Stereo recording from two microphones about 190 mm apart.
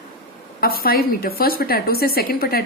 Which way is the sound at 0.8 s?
50° left (ahead or behind).